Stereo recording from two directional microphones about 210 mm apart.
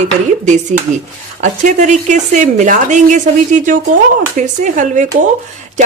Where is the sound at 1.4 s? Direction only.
35° right (ahead or behind).